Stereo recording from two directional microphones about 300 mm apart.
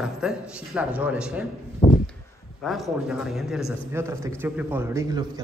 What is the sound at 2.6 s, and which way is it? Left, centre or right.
A man's voice, centre.